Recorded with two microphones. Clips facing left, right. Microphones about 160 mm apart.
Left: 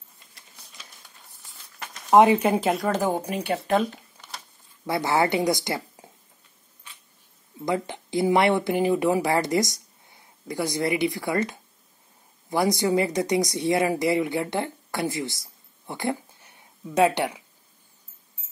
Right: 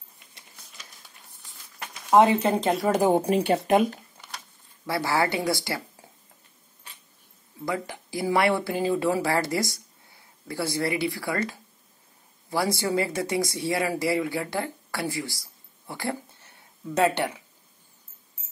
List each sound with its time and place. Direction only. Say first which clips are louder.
2.0 s speech: left 2 dB; 15° left (ahead or behind)
2.9 s speech: right 7 dB; 15° right (ahead or behind)
3.2 s speech: right 5 dB; 30° right (ahead or behind)
3.6 s speech: left 1 dB; 15° right (ahead or behind)
4.8 s speech: left 2 dB; 20° left (ahead or behind)
7.6 s speech: left 4 dB; 20° left (ahead or behind)